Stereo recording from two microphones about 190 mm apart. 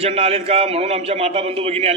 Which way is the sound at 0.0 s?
30° right (ahead or behind).